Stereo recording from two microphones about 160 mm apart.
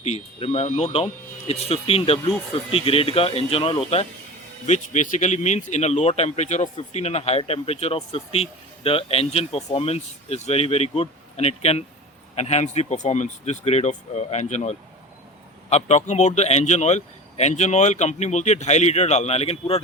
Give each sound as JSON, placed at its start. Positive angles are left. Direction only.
{"t": 0.0, "sound": "speech", "side_deg": 40}
{"t": 4.6, "sound": "speech", "side_deg": 50}